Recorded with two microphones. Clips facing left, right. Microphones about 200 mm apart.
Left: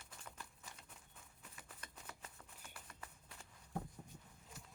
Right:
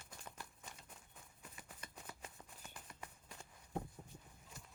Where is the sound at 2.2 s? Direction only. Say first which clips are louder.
Right 3 dB; 15° right (ahead or behind).